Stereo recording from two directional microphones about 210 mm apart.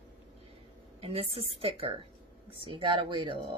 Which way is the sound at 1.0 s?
25° right (ahead or behind).